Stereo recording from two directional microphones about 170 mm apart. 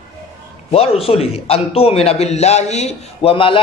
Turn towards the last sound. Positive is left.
turn(degrees=30)  # may be behind; listen again after turning